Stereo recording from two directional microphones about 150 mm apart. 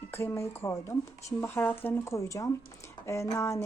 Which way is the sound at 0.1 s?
15° left (ahead or behind).